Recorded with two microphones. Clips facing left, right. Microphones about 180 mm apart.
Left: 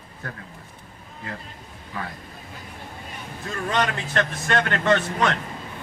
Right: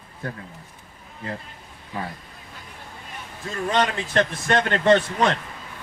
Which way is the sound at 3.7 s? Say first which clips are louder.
Right 3 dB; 25° right (ahead or behind).